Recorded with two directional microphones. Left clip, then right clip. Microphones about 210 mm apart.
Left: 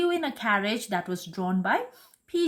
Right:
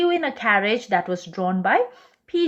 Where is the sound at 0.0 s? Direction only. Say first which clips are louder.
Right 6 dB; 40° left (ahead or behind).